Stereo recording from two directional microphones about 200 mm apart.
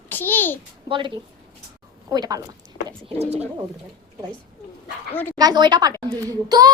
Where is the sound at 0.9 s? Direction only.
25° right (ahead or behind).